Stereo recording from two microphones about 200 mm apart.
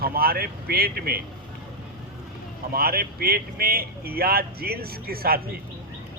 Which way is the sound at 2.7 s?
50° right (ahead or behind).